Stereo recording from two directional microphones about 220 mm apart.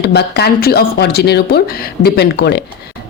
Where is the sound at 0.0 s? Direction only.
50° left (ahead or behind).